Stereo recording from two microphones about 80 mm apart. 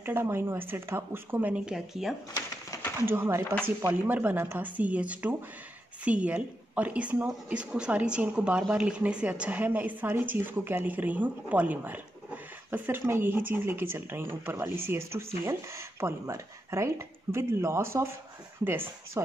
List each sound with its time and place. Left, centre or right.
0.0 s a woman's voice: right
1.5 s a woman's voice: centre
3.1 s speech: right
4.1 s a woman's voice: centre